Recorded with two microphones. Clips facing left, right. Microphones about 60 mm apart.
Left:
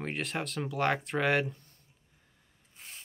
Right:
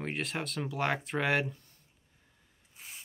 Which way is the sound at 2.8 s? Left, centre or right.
Centre.